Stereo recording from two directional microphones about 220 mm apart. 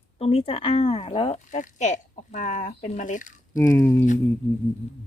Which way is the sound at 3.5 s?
15° left (ahead or behind).